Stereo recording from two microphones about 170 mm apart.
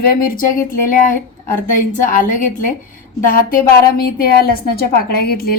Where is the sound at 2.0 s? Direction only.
50° left (ahead or behind).